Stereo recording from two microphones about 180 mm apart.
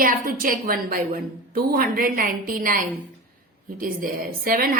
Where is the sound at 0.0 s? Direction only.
50° right (ahead or behind).